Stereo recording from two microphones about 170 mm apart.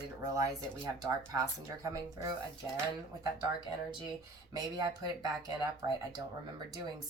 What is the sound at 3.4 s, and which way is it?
A woman's voice, 25° right (ahead or behind).